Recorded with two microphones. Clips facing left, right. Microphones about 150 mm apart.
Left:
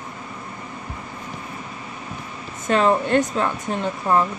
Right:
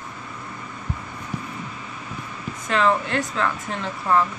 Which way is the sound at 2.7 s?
30° left (ahead or behind).